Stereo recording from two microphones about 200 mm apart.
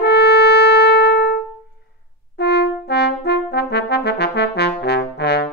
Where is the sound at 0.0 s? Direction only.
55° left (ahead or behind).